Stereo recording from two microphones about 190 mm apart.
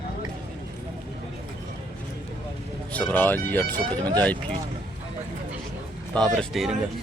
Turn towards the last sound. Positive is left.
turn(degrees=0)  # may be behind; listen again after turning